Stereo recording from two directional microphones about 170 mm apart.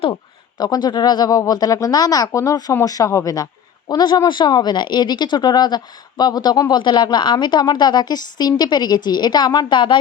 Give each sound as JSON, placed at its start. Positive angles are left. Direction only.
{"t": 0.6, "sound": "speech", "side_deg": 25}